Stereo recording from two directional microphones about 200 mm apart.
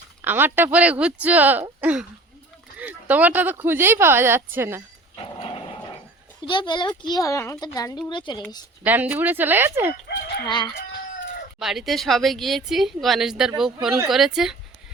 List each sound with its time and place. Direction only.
0.2 s speech: 10° right (ahead or behind)
5.4 s dog: 25° left (ahead or behind)
6.4 s speech: 25° left (ahead or behind)
8.8 s speech: 10° right (ahead or behind)
10.4 s speech: 25° left (ahead or behind)
11.6 s speech: centre (ahead or behind)